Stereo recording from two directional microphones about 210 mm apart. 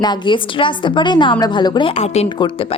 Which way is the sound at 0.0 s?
20° left (ahead or behind).